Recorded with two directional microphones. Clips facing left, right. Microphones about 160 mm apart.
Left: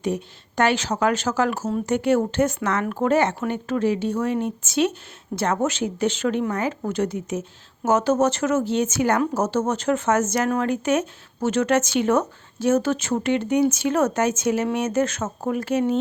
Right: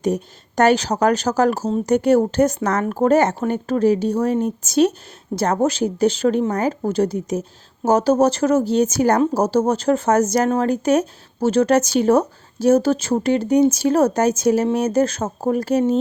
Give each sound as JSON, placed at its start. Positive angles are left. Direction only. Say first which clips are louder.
{"t": 0.0, "sound": "speech", "louder": "right 4 dB", "side_deg": -40}